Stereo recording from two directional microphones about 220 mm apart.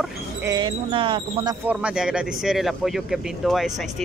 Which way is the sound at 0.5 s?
20° right (ahead or behind).